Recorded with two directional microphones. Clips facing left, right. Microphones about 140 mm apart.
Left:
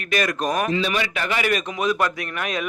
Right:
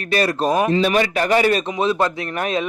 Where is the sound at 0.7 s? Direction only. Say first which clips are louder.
Right 6 dB; 45° right (ahead or behind).